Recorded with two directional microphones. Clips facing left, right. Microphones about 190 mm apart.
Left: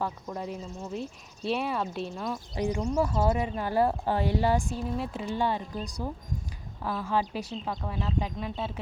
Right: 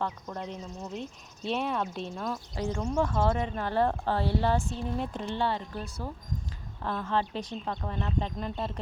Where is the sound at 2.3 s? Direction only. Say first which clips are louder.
Left 5 dB; 15° left (ahead or behind).